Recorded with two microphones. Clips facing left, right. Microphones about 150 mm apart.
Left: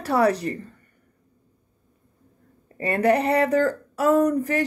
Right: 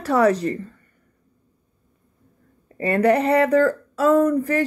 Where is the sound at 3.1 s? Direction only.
20° left (ahead or behind).